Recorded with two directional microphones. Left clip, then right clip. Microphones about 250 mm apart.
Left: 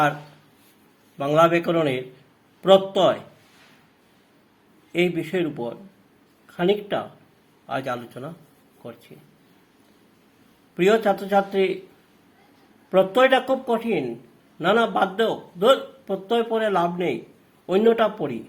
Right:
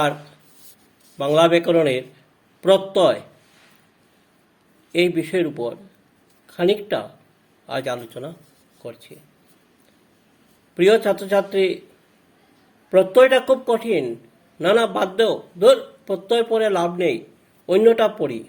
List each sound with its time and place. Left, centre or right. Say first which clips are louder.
1.2 s speech: right 2 dB; centre
4.9 s speech: right 4 dB; centre
6.8 s speech: right 2 dB; centre
10.8 s speech: right 3 dB; right
12.9 s speech: right 4 dB; right